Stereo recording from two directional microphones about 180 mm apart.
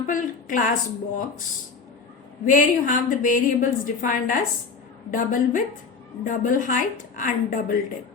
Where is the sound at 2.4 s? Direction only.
45° left (ahead or behind).